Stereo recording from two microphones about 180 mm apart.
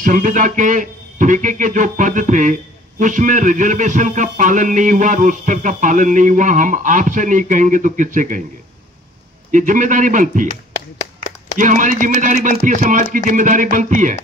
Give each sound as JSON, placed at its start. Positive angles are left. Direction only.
{"t": 0.0, "sound": "a man's voice", "side_deg": -45}
{"t": 9.5, "sound": "a man's voice", "side_deg": -45}
{"t": 11.5, "sound": "a man's voice", "side_deg": -45}